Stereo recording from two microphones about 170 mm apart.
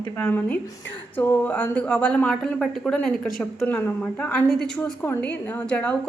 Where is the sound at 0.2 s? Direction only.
15° left (ahead or behind).